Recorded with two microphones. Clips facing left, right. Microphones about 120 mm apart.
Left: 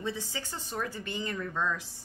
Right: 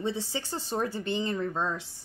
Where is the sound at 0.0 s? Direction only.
25° right (ahead or behind).